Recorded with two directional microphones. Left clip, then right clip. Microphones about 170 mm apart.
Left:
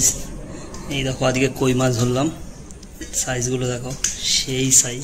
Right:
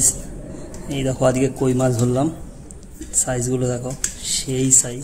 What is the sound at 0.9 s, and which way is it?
Speech, 30° right (ahead or behind).